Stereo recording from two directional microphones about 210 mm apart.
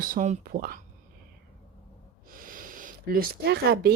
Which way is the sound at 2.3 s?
40° right (ahead or behind).